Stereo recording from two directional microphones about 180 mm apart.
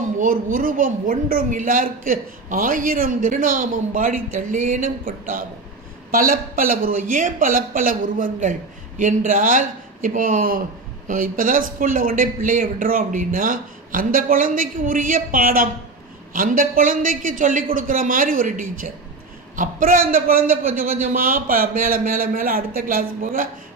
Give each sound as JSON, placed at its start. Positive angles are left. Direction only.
{"t": 0.2, "sound": "a woman's voice", "side_deg": -50}
{"t": 6.1, "sound": "a woman's voice", "side_deg": -50}